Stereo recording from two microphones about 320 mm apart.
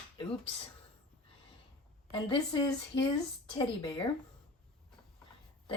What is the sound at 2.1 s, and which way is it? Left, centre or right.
Speech, centre.